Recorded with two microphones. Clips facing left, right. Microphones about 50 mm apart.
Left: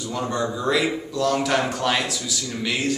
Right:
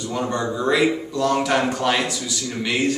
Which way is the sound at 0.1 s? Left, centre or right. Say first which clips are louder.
Right 1 dB; centre.